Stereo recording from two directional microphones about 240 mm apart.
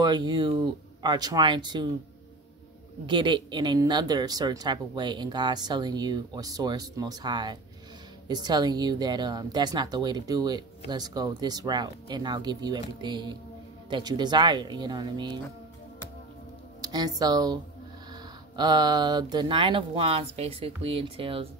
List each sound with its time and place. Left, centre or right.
0.0 s speech: centre
3.1 s speech: centre
16.8 s speech: centre